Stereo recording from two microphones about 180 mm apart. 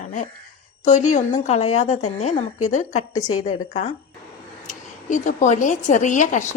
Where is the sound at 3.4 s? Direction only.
35° left (ahead or behind).